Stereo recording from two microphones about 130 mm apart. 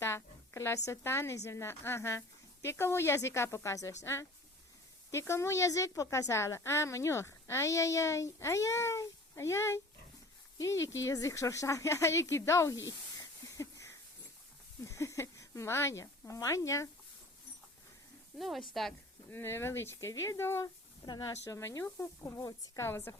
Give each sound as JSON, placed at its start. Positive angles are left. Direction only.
{"t": 0.0, "sound": "a sound", "side_deg": 20}
{"t": 0.9, "sound": "a woman's voice", "side_deg": 20}
{"t": 13.6, "sound": "a sound", "side_deg": 25}
{"t": 14.8, "sound": "speech", "side_deg": 25}
{"t": 18.3, "sound": "speech", "side_deg": 0}
{"t": 19.3, "sound": "a woman's voice", "side_deg": 20}